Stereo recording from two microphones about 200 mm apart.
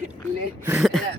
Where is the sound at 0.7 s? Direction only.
Centre (ahead or behind).